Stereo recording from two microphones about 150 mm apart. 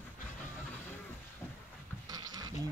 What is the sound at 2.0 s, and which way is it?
Goat, 25° right (ahead or behind).